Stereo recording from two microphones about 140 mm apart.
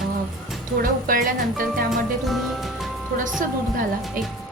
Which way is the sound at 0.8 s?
85° right.